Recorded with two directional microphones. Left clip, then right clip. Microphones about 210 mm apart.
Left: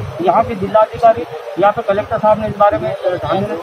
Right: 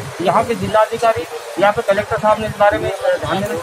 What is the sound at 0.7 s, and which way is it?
Speech, 20° right (ahead or behind).